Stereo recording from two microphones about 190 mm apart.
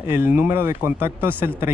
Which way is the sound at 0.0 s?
10° right (ahead or behind).